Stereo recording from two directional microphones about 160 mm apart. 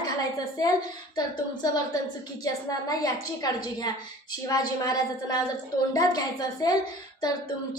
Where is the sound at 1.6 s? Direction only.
25° left (ahead or behind).